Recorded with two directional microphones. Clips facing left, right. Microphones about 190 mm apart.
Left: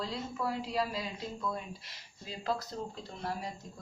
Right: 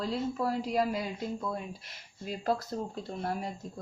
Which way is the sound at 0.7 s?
45° right (ahead or behind).